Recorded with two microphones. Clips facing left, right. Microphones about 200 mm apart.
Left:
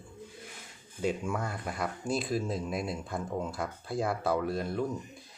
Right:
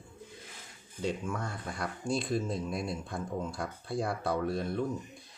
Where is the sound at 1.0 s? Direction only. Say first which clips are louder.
Left 3 dB; 10° left (ahead or behind).